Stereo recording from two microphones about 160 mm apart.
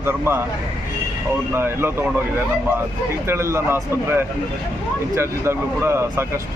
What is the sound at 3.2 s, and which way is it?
Speech, 15° right (ahead or behind).